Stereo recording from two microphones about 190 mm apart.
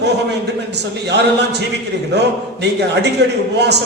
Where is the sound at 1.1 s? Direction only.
60° right (ahead or behind).